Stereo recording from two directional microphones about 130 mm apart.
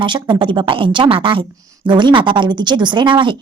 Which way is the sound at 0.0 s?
40° right (ahead or behind).